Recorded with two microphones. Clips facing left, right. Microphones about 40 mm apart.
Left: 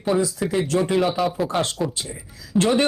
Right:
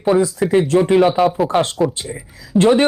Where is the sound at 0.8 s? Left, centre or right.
Right.